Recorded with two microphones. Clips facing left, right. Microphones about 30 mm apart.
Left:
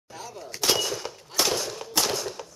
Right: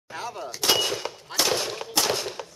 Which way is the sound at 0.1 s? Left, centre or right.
Right.